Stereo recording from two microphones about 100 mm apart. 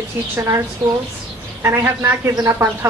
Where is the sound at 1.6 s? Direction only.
25° right (ahead or behind).